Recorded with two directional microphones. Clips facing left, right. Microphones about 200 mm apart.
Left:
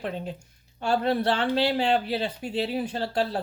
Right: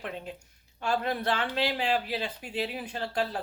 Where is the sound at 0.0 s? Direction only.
30° left (ahead or behind).